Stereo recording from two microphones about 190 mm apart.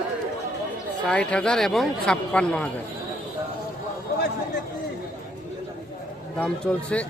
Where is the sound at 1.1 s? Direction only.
5° left (ahead or behind).